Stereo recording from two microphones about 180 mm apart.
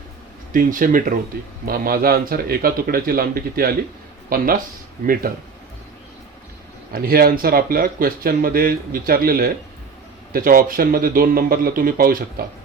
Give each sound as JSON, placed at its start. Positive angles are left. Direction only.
{"t": 0.5, "sound": "speech", "side_deg": -50}
{"t": 6.9, "sound": "speech", "side_deg": -55}